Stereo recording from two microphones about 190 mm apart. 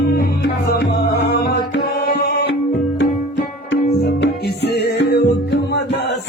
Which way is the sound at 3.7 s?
65° left (ahead or behind).